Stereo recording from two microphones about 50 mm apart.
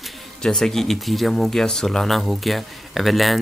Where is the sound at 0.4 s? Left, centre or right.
Centre.